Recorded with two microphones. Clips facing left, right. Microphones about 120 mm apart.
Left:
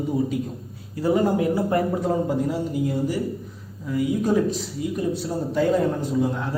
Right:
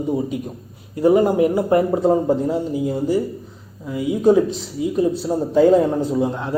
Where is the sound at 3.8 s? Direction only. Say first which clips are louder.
Right 6 dB; 25° right (ahead or behind).